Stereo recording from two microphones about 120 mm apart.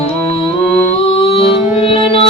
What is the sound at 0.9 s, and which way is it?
Music, 50° left (ahead or behind).